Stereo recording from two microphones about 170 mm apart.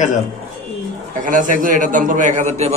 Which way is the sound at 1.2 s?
50° right (ahead or behind).